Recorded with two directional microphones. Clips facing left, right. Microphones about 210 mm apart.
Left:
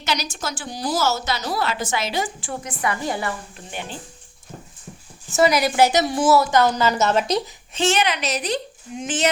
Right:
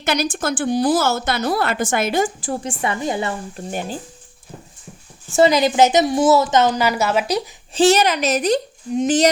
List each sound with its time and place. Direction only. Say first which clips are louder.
0.0 s a woman's voice: right 6 dB; 55° right (ahead or behind); by 3.3 s 20° right (ahead or behind)
3.7 s a woman's voice: right 6 dB; 40° right (ahead or behind)
5.4 s a woman's voice: right 3 dB; 25° right (ahead or behind); by 7.4 s 5° right (ahead or behind)
7.7 s a woman's voice: right 6 dB; 35° right (ahead or behind)